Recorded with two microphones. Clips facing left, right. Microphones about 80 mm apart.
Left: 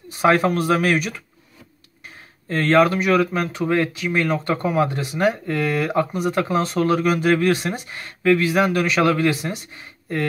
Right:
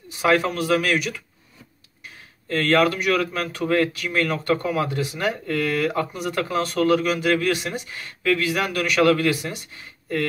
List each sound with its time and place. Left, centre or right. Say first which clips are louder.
0.2 s speech: left 3 dB; left
2.4 s speech: left 3 dB; left
8.3 s speech: left 5 dB; left